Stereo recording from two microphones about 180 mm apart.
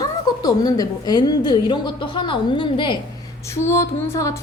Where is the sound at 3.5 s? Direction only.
15° left (ahead or behind).